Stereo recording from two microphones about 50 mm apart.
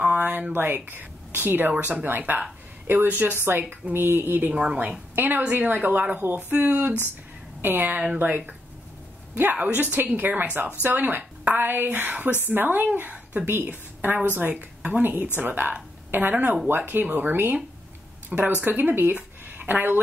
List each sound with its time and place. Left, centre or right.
0.0 s a sound: right
0.5 s a woman's voice: right
18.6 s speech: right